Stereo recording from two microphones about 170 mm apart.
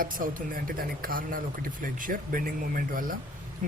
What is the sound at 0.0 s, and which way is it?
Speech, 55° right (ahead or behind).